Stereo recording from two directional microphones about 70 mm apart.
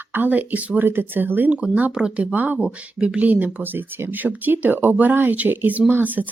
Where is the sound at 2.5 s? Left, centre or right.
Centre.